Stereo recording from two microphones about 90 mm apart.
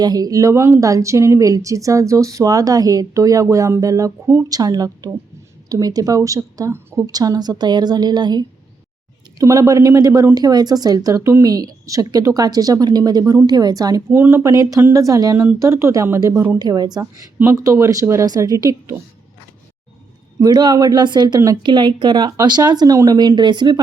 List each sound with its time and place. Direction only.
0.0 s a woman's voice: 45° right (ahead or behind)
9.4 s a woman's voice: 40° right (ahead or behind)
11.2 s speech: 30° right (ahead or behind)
11.4 s a woman's voice: 45° right (ahead or behind)
14.1 s speech: 25° right (ahead or behind)
14.5 s speech: 40° right (ahead or behind)
16.6 s a woman's voice: 50° right (ahead or behind)
17.4 s speech: 35° right (ahead or behind)
20.4 s a woman's voice: 45° right (ahead or behind)